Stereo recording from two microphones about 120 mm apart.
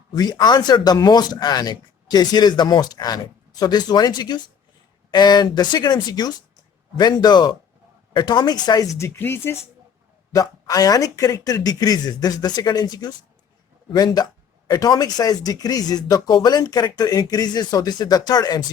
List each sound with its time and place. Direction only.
0.1 s speech: 35° left (ahead or behind)
9.0 s speech: 20° left (ahead or behind)
10.3 s speech: 30° left (ahead or behind)